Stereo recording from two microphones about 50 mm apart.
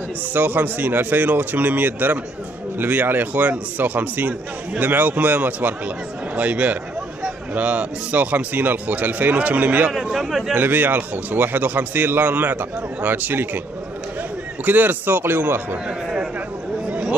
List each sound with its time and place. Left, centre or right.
0.3 s a man's voice: right
14.6 s a man's voice: right